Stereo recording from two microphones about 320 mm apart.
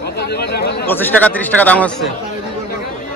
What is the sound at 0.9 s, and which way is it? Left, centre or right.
A man's voice, centre.